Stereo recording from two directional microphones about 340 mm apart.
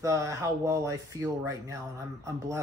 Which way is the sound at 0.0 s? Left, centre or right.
Centre.